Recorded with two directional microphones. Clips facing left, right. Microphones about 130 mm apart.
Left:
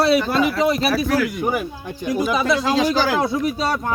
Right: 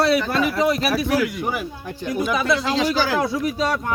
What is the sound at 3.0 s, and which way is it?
Speech, 25° left (ahead or behind).